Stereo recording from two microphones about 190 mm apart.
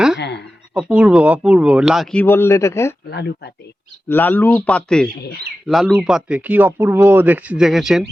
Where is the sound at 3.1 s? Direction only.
60° left (ahead or behind).